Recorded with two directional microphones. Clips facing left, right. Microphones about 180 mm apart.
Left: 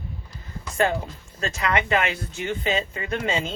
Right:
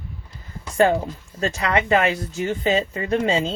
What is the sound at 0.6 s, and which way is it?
Speech, 25° right (ahead or behind).